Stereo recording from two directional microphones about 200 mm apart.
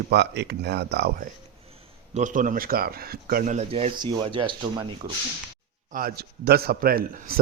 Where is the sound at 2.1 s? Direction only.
40° right (ahead or behind); by 5.1 s 25° right (ahead or behind).